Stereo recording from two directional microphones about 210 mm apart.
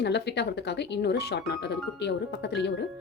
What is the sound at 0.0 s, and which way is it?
Speech, 55° left (ahead or behind).